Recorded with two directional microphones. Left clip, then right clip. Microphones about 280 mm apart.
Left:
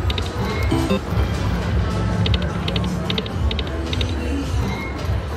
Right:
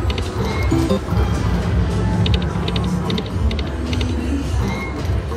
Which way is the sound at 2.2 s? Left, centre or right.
Centre.